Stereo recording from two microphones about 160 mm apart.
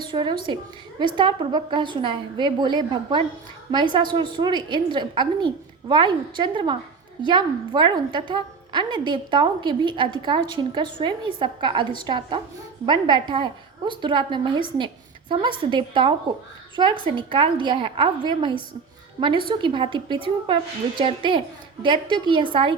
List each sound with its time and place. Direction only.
0.0 s a woman's voice: 30° right (ahead or behind)